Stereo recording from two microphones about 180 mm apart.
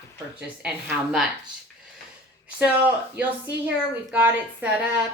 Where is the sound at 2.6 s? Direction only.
10° right (ahead or behind).